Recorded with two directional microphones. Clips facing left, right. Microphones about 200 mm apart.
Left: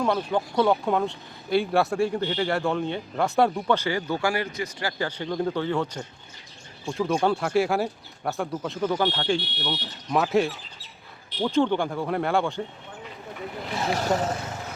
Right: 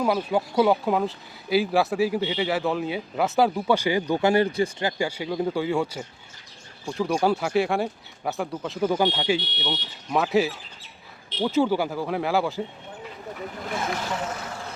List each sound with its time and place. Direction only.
0.0 s speech: 5° right (ahead or behind)
8.8 s speech: 15° right (ahead or behind)
14.1 s speech: 40° left (ahead or behind)